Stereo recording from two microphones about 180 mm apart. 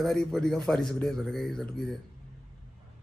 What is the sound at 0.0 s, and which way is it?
Speech, centre (ahead or behind).